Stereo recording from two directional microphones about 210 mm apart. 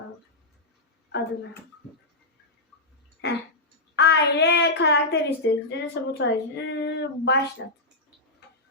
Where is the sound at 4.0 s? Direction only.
55° left (ahead or behind).